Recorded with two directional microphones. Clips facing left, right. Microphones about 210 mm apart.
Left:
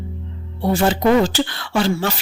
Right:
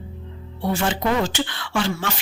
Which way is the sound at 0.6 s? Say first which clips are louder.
Left 6 dB; 35° left (ahead or behind).